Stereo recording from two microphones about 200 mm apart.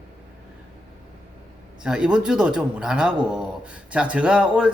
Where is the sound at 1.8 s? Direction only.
5° right (ahead or behind).